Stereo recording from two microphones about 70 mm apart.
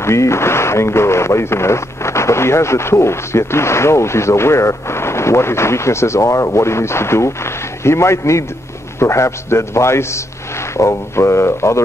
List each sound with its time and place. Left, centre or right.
0.0 s speech: left